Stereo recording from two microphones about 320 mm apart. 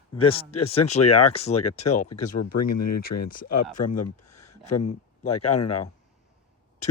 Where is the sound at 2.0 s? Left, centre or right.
Left.